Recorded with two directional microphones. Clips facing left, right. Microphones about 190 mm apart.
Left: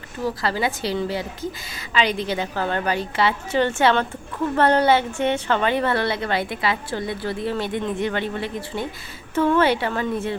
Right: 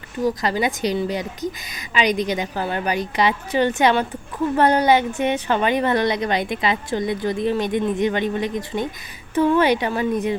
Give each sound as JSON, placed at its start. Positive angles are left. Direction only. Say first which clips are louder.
{"t": 0.2, "sound": "a woman's voice", "louder": "right 3 dB", "side_deg": -15}